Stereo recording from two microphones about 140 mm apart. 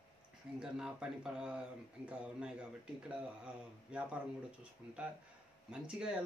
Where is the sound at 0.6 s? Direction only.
5° right (ahead or behind).